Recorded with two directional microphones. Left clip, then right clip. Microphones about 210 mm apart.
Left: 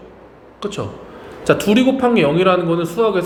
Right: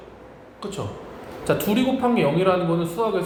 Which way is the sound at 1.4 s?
40° left (ahead or behind).